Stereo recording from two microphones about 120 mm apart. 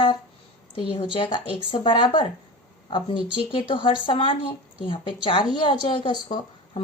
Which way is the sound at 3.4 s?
45° left (ahead or behind).